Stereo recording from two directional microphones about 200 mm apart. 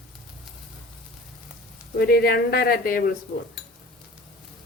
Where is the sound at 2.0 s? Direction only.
50° left (ahead or behind).